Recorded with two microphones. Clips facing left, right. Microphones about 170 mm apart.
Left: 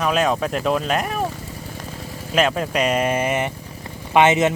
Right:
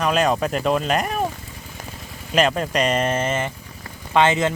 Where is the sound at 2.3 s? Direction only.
Centre (ahead or behind).